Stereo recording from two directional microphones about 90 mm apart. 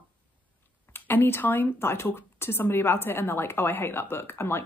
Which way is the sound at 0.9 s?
25° left (ahead or behind).